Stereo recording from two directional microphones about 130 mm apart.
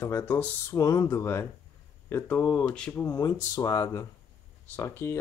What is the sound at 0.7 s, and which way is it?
Speech, 25° left (ahead or behind).